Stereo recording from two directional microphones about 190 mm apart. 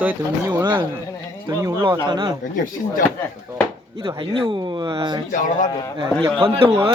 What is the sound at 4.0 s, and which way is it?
Speech, 20° right (ahead or behind).